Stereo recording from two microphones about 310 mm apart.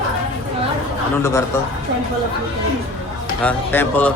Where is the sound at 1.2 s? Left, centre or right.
Centre.